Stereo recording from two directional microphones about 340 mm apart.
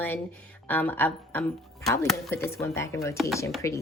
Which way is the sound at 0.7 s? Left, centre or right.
Centre.